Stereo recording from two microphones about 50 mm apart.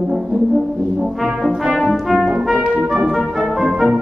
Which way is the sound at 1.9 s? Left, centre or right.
Centre.